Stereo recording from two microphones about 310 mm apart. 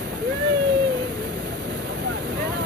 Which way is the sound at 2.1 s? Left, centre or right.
Right.